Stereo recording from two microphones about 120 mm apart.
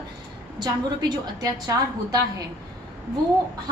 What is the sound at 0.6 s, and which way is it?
A woman's voice, 35° right (ahead or behind).